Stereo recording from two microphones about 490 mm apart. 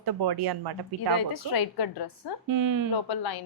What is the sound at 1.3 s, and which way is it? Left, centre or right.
Speech, left.